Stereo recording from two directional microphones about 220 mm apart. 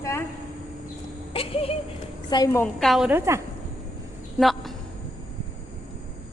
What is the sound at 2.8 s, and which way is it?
Speech, centre (ahead or behind).